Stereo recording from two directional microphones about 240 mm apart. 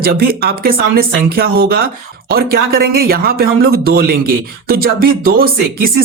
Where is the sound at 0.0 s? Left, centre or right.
Right.